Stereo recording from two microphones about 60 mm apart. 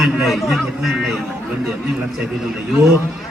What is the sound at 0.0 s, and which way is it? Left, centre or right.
A man's voice, centre.